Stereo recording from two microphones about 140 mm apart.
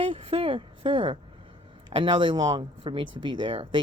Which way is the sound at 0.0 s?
40° right (ahead or behind).